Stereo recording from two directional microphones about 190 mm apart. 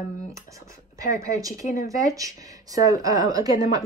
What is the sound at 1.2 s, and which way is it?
A woman's voice, 15° right (ahead or behind).